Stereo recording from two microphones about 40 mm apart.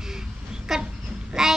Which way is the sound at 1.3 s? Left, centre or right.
Centre.